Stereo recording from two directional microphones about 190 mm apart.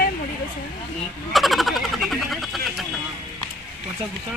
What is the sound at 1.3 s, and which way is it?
Speech, centre (ahead or behind).